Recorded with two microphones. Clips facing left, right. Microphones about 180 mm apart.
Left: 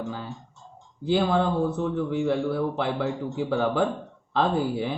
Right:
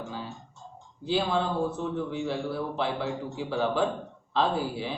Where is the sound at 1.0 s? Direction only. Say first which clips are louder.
Left 4 dB; 55° left (ahead or behind).